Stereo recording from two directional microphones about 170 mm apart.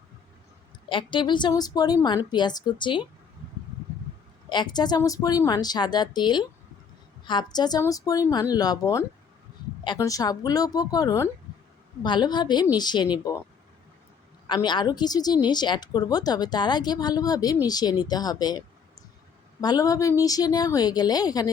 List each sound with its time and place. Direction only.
0.9 s a woman's voice: 30° left (ahead or behind)
4.4 s a woman's voice: 25° left (ahead or behind)
14.4 s a woman's voice: 25° left (ahead or behind)
19.6 s a woman's voice: 20° left (ahead or behind)